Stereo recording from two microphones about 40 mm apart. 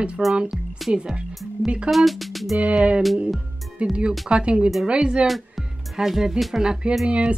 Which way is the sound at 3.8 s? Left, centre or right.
Right.